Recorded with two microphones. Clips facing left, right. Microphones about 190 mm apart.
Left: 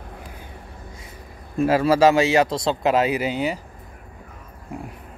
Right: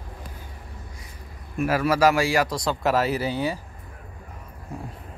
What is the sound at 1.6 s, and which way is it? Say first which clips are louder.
Speech: left 4 dB; 25° left (ahead or behind).